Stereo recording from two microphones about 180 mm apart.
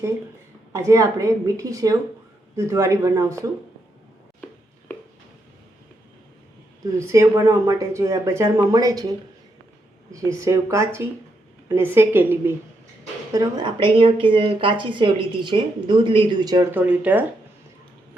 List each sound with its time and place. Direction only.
0.7 s speech: 15° right (ahead or behind)
7.0 s speech: 15° right (ahead or behind)
13.3 s a woman's voice: 25° right (ahead or behind)
16.7 s speech: 10° right (ahead or behind)